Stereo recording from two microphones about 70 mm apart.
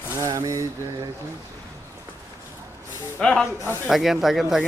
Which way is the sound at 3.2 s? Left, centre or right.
Centre.